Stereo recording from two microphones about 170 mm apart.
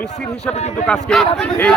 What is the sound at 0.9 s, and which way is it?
Speech, 5° left (ahead or behind).